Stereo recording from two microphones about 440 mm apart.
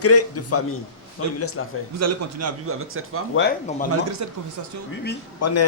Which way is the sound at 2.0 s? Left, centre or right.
Right.